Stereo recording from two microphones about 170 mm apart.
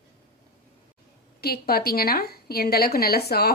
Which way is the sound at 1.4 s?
65° left (ahead or behind).